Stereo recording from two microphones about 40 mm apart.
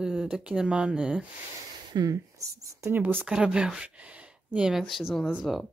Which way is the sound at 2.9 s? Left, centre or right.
Right.